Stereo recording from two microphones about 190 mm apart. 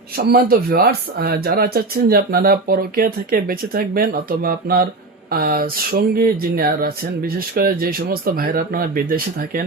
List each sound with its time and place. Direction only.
0.2 s speech: 55° right (ahead or behind)